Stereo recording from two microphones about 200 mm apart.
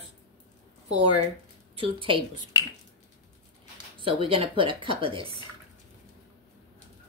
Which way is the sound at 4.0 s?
25° right (ahead or behind).